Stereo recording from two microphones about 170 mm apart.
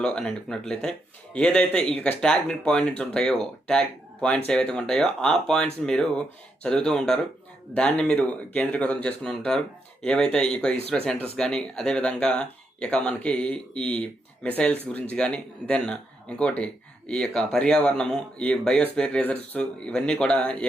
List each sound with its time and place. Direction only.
0.0 s speech: 5° left (ahead or behind)